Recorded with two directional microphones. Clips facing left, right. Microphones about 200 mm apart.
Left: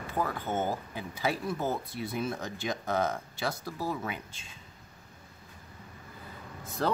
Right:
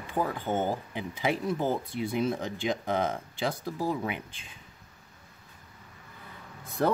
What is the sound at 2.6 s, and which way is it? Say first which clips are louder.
Speech: right 1 dB; 20° right (ahead or behind).